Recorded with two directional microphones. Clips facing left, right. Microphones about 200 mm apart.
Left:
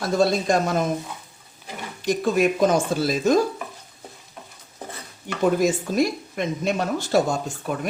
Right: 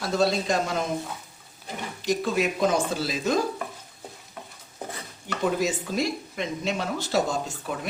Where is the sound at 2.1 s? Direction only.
50° left (ahead or behind).